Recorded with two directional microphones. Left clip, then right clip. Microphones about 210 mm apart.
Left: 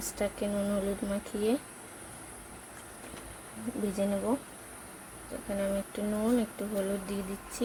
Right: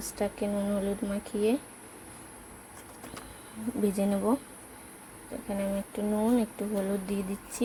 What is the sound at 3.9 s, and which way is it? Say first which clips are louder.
Speech: even; 15° right (ahead or behind).